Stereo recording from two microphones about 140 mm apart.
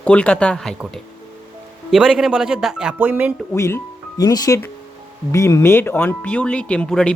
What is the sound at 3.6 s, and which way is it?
Speech, 20° left (ahead or behind).